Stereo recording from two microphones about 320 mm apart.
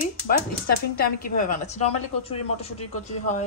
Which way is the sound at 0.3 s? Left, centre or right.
Left.